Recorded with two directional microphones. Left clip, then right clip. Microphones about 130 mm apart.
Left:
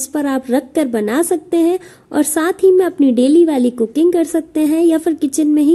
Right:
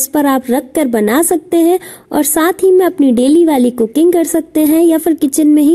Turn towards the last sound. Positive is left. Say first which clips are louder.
# right 4 dB
turn(degrees=-25)  # may be behind; listen again after turning